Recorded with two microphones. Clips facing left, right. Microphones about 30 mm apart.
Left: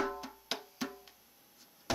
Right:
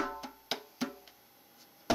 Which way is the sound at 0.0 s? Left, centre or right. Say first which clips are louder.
Left 1 dB; centre.